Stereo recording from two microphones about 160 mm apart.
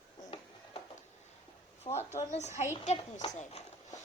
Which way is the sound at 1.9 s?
30° left (ahead or behind).